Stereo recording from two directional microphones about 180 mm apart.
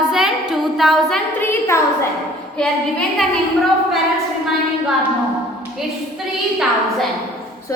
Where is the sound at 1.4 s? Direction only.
15° left (ahead or behind).